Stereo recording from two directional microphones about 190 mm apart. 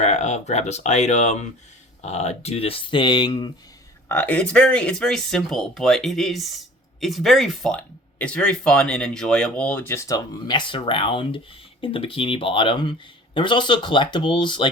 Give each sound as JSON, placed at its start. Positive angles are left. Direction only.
{"t": 0.0, "sound": "speech", "side_deg": 35}
{"t": 4.1, "sound": "speech", "side_deg": 10}